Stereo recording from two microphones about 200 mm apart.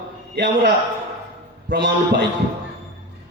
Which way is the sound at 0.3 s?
55° right (ahead or behind).